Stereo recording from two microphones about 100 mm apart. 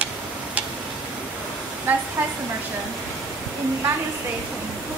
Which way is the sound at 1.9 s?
20° right (ahead or behind).